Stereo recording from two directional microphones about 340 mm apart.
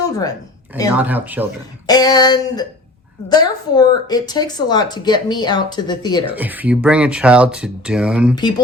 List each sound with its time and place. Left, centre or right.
0.1 s speech: centre
0.9 s speech: centre
1.9 s speech: centre
6.3 s speech: centre
8.4 s speech: centre